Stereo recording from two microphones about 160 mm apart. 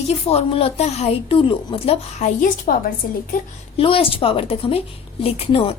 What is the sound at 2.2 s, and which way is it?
Speech, 60° left (ahead or behind).